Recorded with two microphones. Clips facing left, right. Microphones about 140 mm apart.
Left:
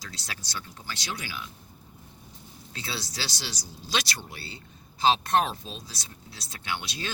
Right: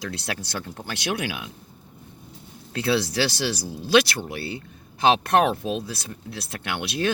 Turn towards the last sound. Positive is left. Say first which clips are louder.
# right 8 dB
turn(degrees=-60)  # may be behind; listen again after turning